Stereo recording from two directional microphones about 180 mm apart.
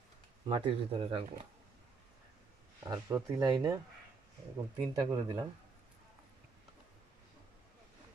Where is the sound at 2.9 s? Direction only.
15° right (ahead or behind).